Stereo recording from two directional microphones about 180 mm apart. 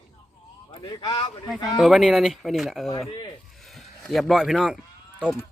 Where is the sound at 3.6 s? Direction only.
Centre (ahead or behind).